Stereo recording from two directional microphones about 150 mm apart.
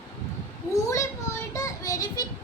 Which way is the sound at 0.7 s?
20° left (ahead or behind).